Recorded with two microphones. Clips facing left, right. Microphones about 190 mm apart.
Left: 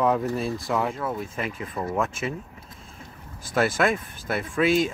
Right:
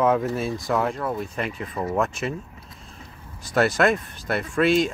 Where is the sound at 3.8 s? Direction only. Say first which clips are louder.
Right 3 dB; 5° left (ahead or behind).